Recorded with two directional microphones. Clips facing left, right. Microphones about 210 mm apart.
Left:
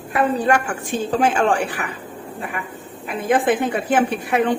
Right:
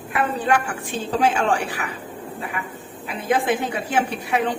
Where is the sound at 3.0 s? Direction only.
50° left (ahead or behind).